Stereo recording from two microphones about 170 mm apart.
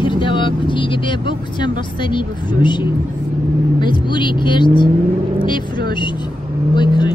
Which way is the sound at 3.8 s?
25° left (ahead or behind).